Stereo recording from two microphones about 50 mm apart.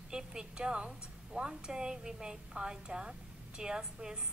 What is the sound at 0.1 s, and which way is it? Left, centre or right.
A woman's voice, centre.